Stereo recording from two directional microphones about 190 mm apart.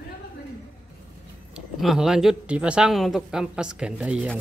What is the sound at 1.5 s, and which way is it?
Speech, centre (ahead or behind).